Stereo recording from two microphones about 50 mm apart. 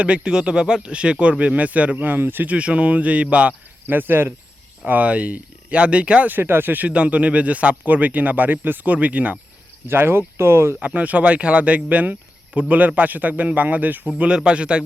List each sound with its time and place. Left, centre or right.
0.0 s speech: right
2.5 s speech: right
3.8 s speech: right
4.9 s speech: right
6.2 s speech: right
6.8 s speech: right
9.9 s speech: right
10.8 s a man's voice: right
14.2 s speech: centre